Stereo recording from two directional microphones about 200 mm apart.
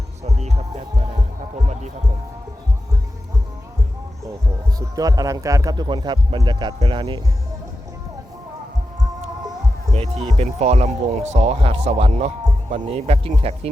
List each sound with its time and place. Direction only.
0.3 s music: 35° right (ahead or behind)
4.8 s speech: 15° right (ahead or behind)
9.9 s speech: 30° right (ahead or behind)